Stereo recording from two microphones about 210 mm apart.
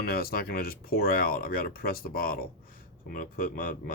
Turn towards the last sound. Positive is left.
turn(degrees=40)  # may be behind; listen again after turning